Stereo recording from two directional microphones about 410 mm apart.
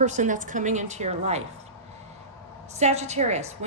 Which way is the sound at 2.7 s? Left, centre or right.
Centre.